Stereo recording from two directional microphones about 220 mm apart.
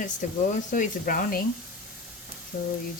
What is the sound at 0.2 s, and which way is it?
Speech, 35° left (ahead or behind).